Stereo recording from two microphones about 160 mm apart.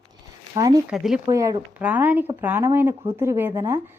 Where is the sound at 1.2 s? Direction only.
20° right (ahead or behind).